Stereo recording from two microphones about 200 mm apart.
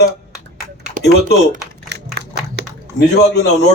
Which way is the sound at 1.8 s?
55° right (ahead or behind).